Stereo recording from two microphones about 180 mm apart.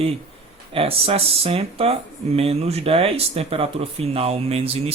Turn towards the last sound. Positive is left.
turn(degrees=-35)  # may be behind; listen again after turning